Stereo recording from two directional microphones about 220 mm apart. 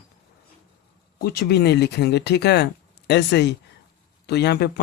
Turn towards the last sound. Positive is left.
turn(degrees=50)  # may be behind; listen again after turning